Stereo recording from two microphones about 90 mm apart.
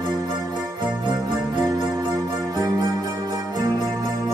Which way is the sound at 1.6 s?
45° right (ahead or behind).